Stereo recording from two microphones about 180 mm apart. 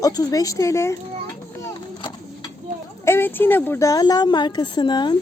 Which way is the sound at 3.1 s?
10° left (ahead or behind).